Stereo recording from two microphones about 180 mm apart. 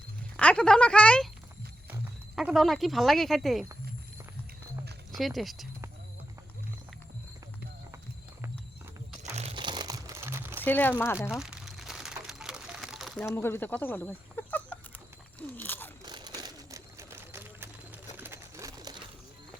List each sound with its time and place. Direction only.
0.3 s speech: 5° left (ahead or behind)
5.1 s speech: centre (ahead or behind)
9.2 s crumpling: 35° right (ahead or behind); by 10.6 s 10° right (ahead or behind)
10.6 s speech: 10° left (ahead or behind)
11.2 s crumpling: centre (ahead or behind)
13.2 s speech: 15° left (ahead or behind)
15.4 s biting: 10° left (ahead or behind)
16.0 s pigeon: 25° right (ahead or behind)